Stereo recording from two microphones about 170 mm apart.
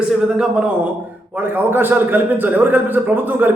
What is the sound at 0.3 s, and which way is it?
A man's voice, 5° right (ahead or behind).